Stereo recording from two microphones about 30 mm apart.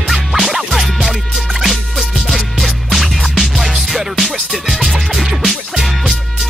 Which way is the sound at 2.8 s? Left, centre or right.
Centre.